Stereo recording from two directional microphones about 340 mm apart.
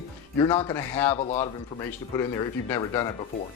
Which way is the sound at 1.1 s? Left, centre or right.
Centre.